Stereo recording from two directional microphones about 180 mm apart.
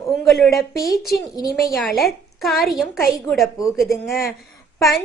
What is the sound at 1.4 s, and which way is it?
Speech, 20° left (ahead or behind).